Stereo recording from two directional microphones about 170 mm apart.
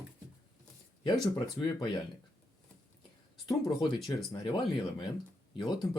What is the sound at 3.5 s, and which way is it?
Speech, 25° left (ahead or behind).